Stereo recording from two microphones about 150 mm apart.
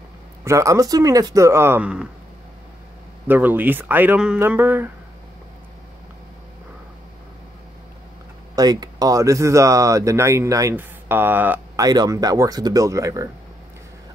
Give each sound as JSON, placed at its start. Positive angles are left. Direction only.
{"t": 0.4, "sound": "speech", "side_deg": -20}
{"t": 3.3, "sound": "speech", "side_deg": -10}
{"t": 8.5, "sound": "speech", "side_deg": -25}
{"t": 11.7, "sound": "speech", "side_deg": -25}